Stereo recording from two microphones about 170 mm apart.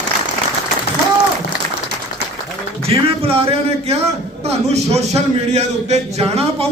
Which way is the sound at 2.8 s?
35° right (ahead or behind).